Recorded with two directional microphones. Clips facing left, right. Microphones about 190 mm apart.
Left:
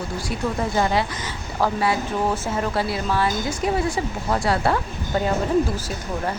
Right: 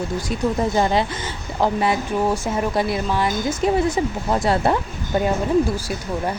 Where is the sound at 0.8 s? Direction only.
25° right (ahead or behind).